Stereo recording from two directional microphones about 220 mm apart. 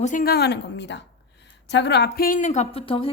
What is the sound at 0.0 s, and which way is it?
A woman's voice, 40° left (ahead or behind).